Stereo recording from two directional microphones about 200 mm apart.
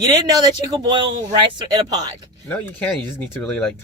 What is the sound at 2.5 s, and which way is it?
Speech, 10° left (ahead or behind).